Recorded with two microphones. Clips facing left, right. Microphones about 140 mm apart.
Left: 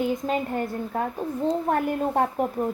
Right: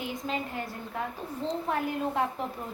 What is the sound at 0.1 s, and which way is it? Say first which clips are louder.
A woman's voice: left 8 dB; 50° left (ahead or behind).